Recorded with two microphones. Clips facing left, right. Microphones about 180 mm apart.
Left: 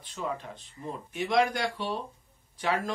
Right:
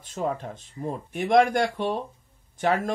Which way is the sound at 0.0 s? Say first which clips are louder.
Right 6 dB; 45° right (ahead or behind).